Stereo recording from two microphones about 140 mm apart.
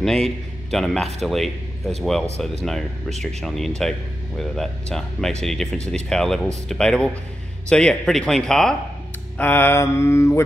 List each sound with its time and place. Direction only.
0.0 s a man's voice: 5° left (ahead or behind)
9.4 s mantra: 15° left (ahead or behind)